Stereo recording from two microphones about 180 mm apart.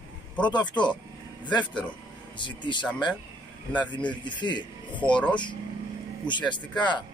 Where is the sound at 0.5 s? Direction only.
25° left (ahead or behind).